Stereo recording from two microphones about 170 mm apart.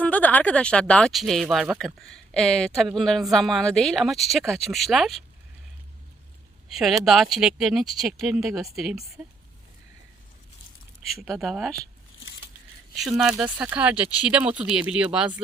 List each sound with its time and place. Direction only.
0.0 s speech: 10° left (ahead or behind)
6.7 s speech: centre (ahead or behind)
11.0 s speech: centre (ahead or behind)
13.0 s speech: centre (ahead or behind)